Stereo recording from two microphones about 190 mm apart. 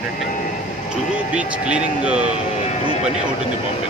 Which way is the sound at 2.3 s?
35° left (ahead or behind).